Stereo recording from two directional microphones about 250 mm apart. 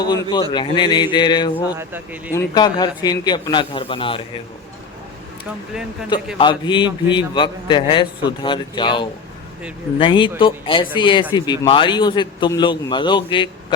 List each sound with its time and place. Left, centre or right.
0.0 s a man's voice: centre
1.7 s speech: centre
2.3 s a man's voice: centre
6.4 s a man's voice: centre